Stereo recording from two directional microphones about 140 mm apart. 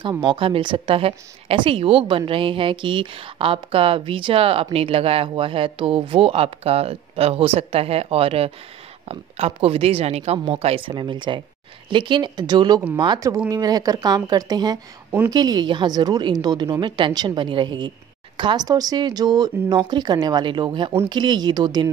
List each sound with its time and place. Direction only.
0.2 s speech: 40° right (ahead or behind)